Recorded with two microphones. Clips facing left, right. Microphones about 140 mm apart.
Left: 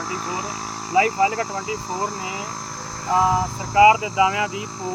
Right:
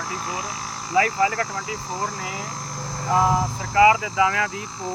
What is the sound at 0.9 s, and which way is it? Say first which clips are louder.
Speech: left 2 dB; 15° left (ahead or behind).